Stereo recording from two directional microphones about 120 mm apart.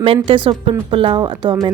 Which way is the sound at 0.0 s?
45° right (ahead or behind).